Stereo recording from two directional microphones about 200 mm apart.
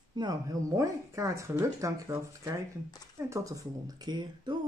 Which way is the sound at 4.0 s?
20° right (ahead or behind).